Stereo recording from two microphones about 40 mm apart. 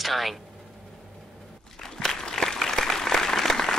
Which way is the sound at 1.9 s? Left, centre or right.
Centre.